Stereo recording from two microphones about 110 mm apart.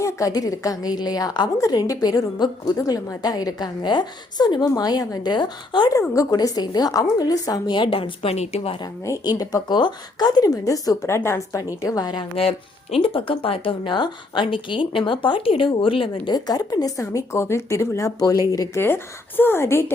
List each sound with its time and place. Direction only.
0.0 s a woman's voice: 30° left (ahead or behind)
6.0 s a woman's voice: 30° left (ahead or behind)
7.8 s speech: 55° left (ahead or behind)
9.0 s a woman's voice: 30° left (ahead or behind)
12.4 s speech: 60° left (ahead or behind)
16.3 s speech: 35° left (ahead or behind)